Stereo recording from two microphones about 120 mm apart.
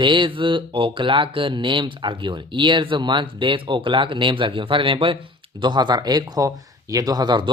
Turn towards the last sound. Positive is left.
turn(degrees=-35)  # may be behind; listen again after turning